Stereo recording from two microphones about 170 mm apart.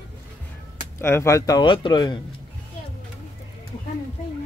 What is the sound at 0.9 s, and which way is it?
Speech, 15° left (ahead or behind).